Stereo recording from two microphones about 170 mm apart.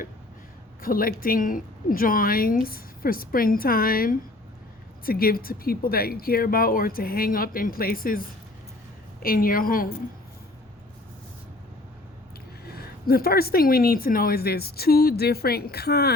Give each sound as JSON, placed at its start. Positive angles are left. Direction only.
{"t": 0.8, "sound": "speech", "side_deg": 60}
{"t": 9.2, "sound": "speech", "side_deg": 55}
{"t": 12.6, "sound": "speech", "side_deg": 65}